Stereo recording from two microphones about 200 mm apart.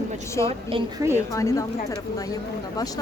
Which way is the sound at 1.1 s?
15° left (ahead or behind).